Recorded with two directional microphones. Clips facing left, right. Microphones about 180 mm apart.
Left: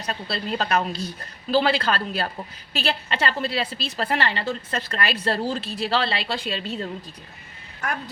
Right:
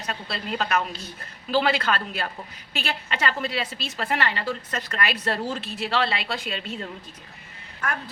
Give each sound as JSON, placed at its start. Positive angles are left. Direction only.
{"t": 0.0, "sound": "a woman's voice", "side_deg": 35}